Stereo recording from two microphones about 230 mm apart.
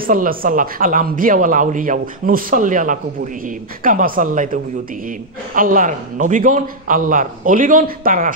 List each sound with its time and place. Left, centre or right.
0.0 s speech: right